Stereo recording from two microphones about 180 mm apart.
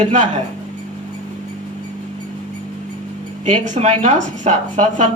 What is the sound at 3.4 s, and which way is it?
Speech, 40° right (ahead or behind).